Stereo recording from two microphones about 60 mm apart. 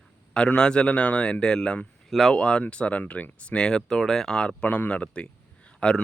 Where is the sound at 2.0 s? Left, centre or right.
Centre.